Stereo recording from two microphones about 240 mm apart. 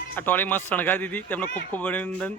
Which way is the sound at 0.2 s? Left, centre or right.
Centre.